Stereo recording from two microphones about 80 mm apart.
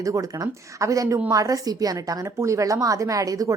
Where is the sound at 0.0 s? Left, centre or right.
Right.